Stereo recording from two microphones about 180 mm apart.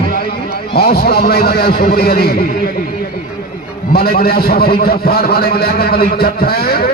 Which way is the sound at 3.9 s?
60° left (ahead or behind).